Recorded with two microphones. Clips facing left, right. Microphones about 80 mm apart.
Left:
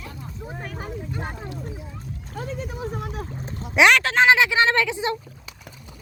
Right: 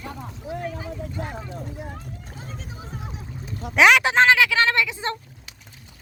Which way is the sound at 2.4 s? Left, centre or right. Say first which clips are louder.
Left 11 dB; left.